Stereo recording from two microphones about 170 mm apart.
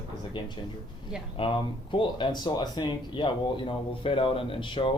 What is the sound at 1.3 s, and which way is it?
Speech, 30° left (ahead or behind).